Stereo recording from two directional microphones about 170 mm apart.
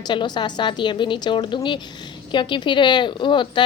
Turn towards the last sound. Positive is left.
turn(degrees=30)  # may be behind; listen again after turning